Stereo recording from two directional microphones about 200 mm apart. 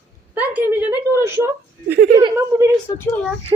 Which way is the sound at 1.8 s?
55° right (ahead or behind).